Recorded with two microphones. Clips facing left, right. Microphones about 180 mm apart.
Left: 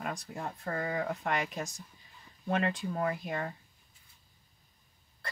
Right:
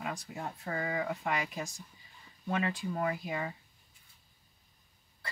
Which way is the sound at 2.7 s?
5° right (ahead or behind).